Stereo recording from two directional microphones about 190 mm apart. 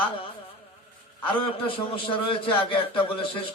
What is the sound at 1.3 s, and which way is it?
A man's voice, 30° left (ahead or behind).